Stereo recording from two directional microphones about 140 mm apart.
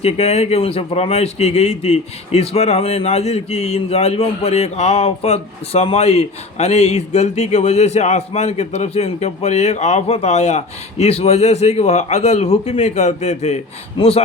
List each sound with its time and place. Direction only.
0.0 s speech: 50° left (ahead or behind)
14.0 s speech: 40° left (ahead or behind)